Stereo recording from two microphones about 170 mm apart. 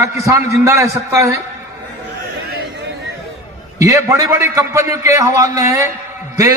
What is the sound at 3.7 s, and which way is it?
A man's voice, 20° right (ahead or behind).